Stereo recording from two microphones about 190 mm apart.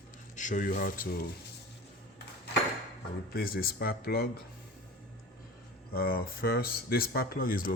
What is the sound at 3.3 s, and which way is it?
Speech, 50° left (ahead or behind).